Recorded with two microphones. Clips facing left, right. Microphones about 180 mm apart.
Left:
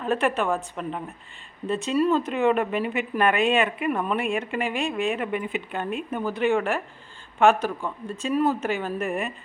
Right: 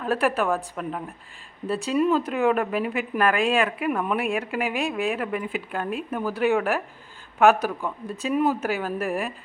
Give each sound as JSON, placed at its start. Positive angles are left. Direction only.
{"t": 0.0, "sound": "speech", "side_deg": 0}
{"t": 8.3, "sound": "speech", "side_deg": -15}
{"t": 8.6, "sound": "speech", "side_deg": 0}